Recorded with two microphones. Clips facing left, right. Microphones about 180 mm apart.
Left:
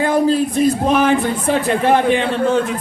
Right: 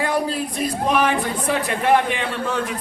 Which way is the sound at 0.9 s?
25° left (ahead or behind).